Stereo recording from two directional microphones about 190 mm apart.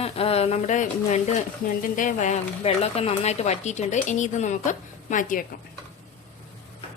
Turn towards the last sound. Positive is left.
turn(degrees=45)  # may be behind; listen again after turning